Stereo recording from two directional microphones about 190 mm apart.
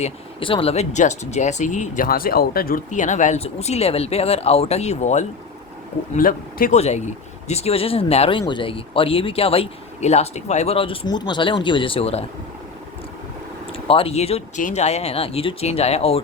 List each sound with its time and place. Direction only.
0.0 s speech: 30° left (ahead or behind); by 6.7 s 45° left (ahead or behind)
6.7 s speech: 35° left (ahead or behind)
13.7 s speech: 30° left (ahead or behind)